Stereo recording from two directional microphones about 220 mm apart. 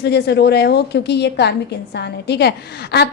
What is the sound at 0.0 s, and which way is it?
A woman's voice, 50° left (ahead or behind).